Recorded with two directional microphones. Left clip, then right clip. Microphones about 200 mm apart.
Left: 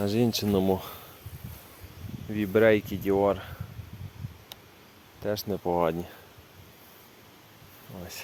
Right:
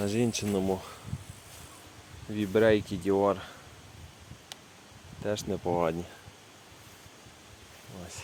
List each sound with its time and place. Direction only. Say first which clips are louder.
0.0 s speech: left 3 dB; 25° left (ahead or behind)
2.3 s speech: left 2 dB; 15° left (ahead or behind)
5.2 s speech: left 2 dB; 15° left (ahead or behind)